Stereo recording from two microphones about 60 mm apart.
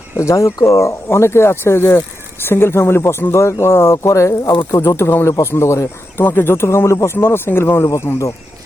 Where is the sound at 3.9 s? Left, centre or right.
Left.